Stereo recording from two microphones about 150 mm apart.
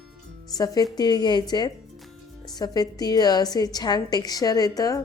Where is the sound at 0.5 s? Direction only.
25° left (ahead or behind).